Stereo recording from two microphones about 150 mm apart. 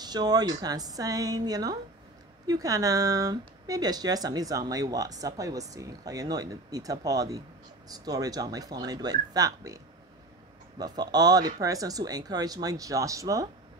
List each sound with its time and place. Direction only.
0.0 s speech: 25° right (ahead or behind)
10.8 s speech: 25° right (ahead or behind)